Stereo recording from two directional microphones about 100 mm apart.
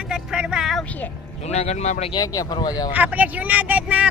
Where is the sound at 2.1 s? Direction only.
45° left (ahead or behind).